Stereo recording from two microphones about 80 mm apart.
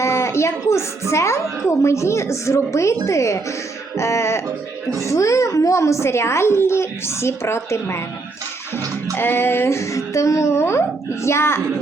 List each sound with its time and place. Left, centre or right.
0.0 s a woman's voice: left
9.1 s a woman's voice: left